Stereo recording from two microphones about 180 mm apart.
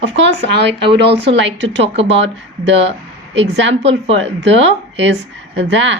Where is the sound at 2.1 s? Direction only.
90° right.